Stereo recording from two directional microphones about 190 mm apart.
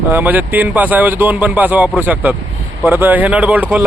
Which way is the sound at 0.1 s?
10° right (ahead or behind).